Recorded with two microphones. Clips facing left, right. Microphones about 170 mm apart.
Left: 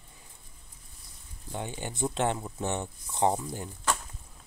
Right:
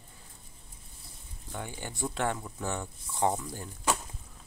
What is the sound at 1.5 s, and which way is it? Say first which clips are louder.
Speech: left 3 dB; 20° left (ahead or behind).